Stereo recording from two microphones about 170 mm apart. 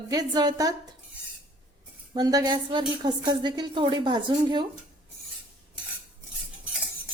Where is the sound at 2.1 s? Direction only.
20° right (ahead or behind).